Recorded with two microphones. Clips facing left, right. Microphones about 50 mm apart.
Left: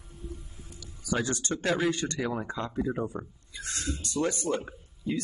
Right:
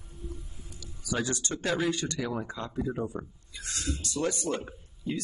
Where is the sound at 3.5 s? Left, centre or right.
Left.